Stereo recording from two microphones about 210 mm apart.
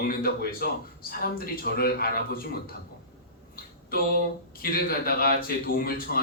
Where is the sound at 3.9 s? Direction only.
45° left (ahead or behind).